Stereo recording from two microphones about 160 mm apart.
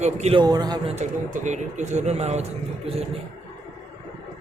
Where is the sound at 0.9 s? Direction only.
50° right (ahead or behind).